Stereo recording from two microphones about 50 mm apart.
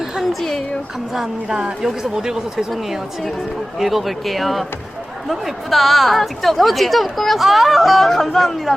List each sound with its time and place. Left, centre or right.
0.2 s a woman's voice: centre
1.1 s a woman's voice: centre
1.5 s speech: centre
2.7 s a woman's voice: centre